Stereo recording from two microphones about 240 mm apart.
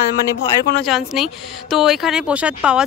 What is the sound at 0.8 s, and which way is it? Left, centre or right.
Speech, centre.